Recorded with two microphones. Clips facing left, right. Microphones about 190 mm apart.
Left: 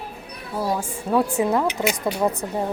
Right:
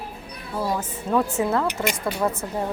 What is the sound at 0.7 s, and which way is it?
A woman's voice, 10° left (ahead or behind).